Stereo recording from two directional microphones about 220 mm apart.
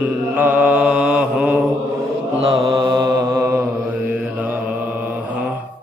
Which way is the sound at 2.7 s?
20° right (ahead or behind).